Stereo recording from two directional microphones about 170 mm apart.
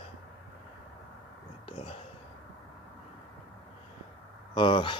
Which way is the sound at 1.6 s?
30° left (ahead or behind).